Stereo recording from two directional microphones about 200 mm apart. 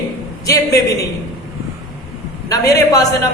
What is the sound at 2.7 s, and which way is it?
Speech, 15° left (ahead or behind).